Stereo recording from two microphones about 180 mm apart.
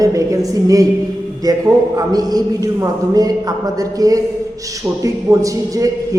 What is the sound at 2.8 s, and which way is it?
A man's voice, 20° right (ahead or behind).